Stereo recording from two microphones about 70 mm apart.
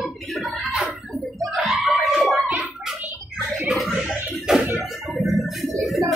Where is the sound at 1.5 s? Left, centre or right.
Centre.